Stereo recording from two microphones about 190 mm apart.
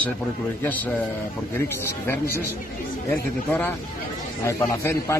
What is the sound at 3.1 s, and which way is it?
A man's voice, 10° left (ahead or behind).